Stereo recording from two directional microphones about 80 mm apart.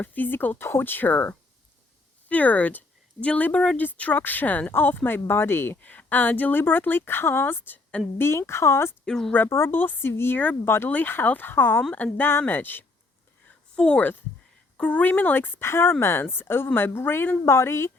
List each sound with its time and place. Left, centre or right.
0.0 s speech: left
9.0 s speech: centre
9.3 s speech: left
13.7 s speech: centre; by 17.9 s left